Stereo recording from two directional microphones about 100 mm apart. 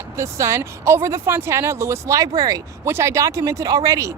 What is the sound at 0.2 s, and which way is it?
Speech, 30° right (ahead or behind).